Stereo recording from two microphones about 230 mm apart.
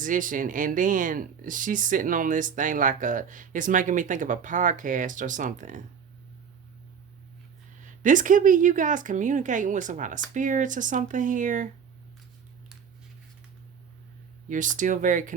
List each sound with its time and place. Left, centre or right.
0.0 s speech: right
7.8 s speech: right
14.5 s speech: right